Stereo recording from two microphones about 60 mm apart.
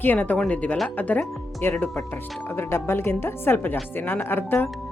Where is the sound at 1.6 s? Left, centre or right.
Left.